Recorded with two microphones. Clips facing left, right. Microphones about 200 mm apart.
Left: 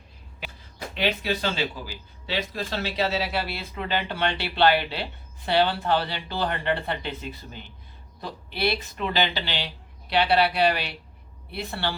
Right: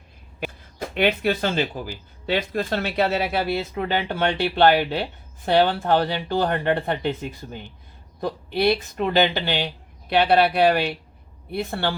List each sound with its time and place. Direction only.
0.9 s speech: 55° right (ahead or behind)